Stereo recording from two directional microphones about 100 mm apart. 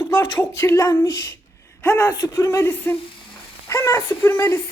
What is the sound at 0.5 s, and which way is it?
Speech, 25° left (ahead or behind).